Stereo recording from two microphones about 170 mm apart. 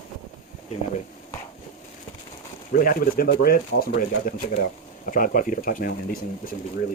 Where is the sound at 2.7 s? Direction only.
55° left (ahead or behind).